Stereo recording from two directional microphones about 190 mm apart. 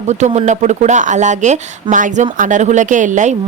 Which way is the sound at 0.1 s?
35° right (ahead or behind).